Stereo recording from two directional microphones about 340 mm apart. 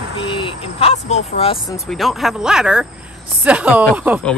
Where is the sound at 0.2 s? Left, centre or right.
Centre.